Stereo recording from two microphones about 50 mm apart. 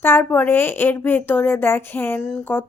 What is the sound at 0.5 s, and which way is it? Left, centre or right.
Speech, left.